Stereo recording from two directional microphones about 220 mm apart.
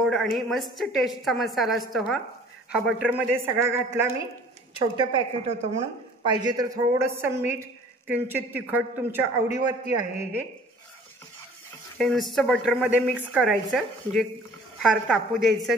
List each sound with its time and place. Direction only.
0.0 s a woman's voice: centre (ahead or behind)
4.9 s a woman's voice: 25° right (ahead or behind)
12.0 s a woman's voice: centre (ahead or behind)